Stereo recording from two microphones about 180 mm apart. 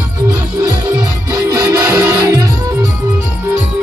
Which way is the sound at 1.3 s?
15° right (ahead or behind).